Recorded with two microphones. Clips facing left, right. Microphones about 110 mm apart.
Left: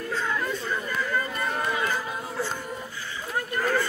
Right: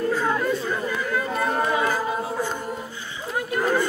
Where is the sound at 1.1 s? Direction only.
10° right (ahead or behind).